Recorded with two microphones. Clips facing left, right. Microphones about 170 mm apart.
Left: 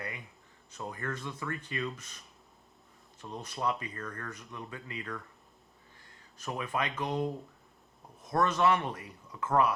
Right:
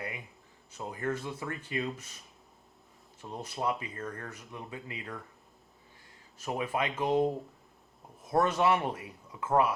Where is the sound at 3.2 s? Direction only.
25° right (ahead or behind).